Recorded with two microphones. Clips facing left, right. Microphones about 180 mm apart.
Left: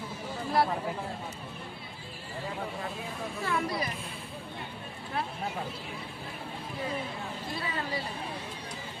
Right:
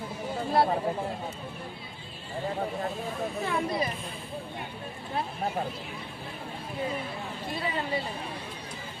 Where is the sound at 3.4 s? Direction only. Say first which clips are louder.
Right 1 dB; 25° right (ahead or behind).